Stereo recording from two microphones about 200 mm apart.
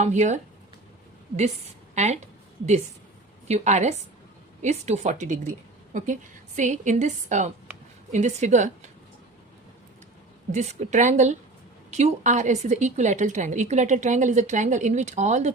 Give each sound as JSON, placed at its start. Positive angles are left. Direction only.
{"t": 0.0, "sound": "a woman's voice", "side_deg": -35}
{"t": 2.0, "sound": "a woman's voice", "side_deg": -35}
{"t": 6.6, "sound": "a woman's voice", "side_deg": -40}
{"t": 10.5, "sound": "a woman's voice", "side_deg": -35}